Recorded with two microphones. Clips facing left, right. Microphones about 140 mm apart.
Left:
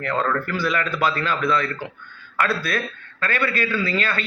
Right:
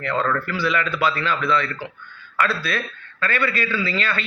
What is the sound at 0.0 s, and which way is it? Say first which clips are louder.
A man's voice: even; 45° left (ahead or behind).